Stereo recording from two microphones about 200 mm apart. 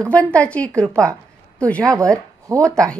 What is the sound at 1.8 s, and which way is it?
Speech, 15° right (ahead or behind).